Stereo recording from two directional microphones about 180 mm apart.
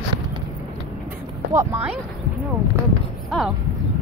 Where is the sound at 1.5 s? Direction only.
15° right (ahead or behind).